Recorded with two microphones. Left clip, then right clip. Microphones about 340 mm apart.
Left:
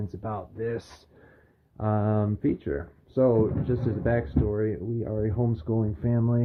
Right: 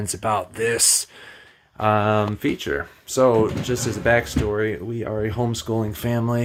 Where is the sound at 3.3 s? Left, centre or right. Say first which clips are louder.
Right 5 dB; right.